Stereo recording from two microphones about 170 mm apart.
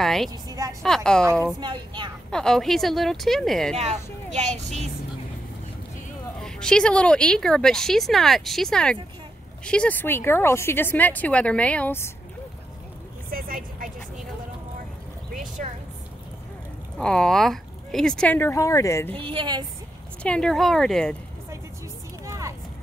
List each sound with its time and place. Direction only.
0.0 s a woman's voice: centre (ahead or behind)
0.3 s speech: 20° right (ahead or behind)
0.8 s speech: 5° left (ahead or behind)
1.2 s a woman's voice: 15° right (ahead or behind)
2.3 s speech: 5° left (ahead or behind)
3.7 s speech: 40° right (ahead or behind)
6.4 s speech: 5° left (ahead or behind)
13.3 s vehicle: 55° right (ahead or behind)
15.3 s a sound: 50° right (ahead or behind)
17.0 s speech: 5° left (ahead or behind)
19.1 s speech: 30° right (ahead or behind)
20.2 s speech: 5° left (ahead or behind)
22.2 s a sound: 15° right (ahead or behind)